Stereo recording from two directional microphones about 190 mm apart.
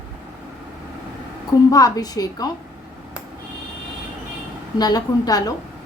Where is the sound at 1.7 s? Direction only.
20° left (ahead or behind).